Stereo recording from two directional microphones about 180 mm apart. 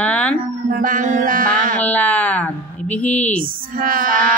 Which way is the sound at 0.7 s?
50° right (ahead or behind).